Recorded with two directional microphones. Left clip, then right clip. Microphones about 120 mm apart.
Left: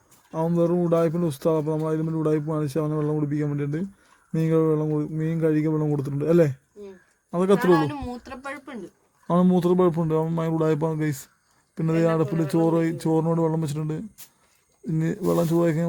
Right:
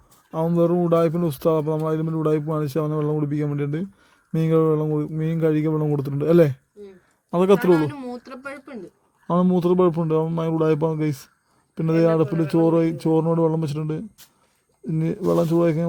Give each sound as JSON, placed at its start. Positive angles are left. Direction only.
{"t": 0.3, "sound": "a man's voice", "side_deg": -30}
{"t": 7.9, "sound": "speech", "side_deg": 70}
{"t": 8.4, "sound": "speech", "side_deg": 40}
{"t": 9.2, "sound": "speech", "side_deg": 0}